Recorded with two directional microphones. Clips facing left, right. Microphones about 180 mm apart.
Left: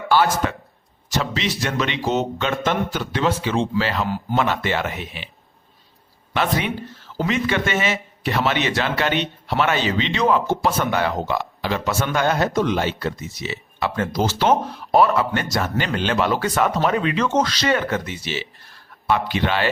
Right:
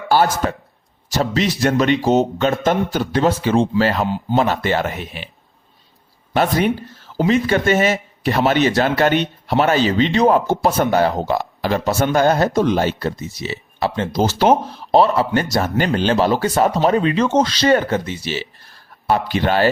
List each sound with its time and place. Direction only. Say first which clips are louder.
0.4 s speech: right 3 dB; 40° right (ahead or behind)
6.3 s speech: right 5 dB; 40° right (ahead or behind)